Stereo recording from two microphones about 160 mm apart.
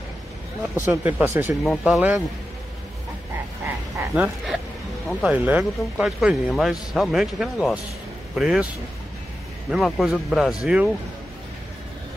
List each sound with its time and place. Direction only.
0.8 s speech: 10° right (ahead or behind)
1.6 s speech: centre (ahead or behind)
2.0 s speech: 10° right (ahead or behind)
3.6 s speech: 10° right (ahead or behind)
9.7 s speech: centre (ahead or behind)